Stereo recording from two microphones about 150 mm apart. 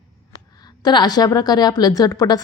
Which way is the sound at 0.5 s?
25° left (ahead or behind).